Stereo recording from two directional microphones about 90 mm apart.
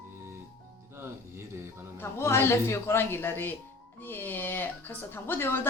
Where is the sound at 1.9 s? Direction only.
30° left (ahead or behind).